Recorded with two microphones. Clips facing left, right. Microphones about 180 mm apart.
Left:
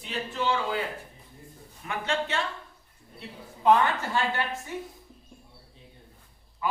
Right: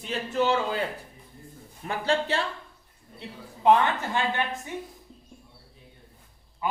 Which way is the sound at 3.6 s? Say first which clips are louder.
Right 1 dB; 20° right (ahead or behind).